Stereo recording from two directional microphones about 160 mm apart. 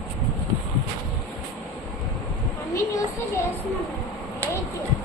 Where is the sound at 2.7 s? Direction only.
20° left (ahead or behind).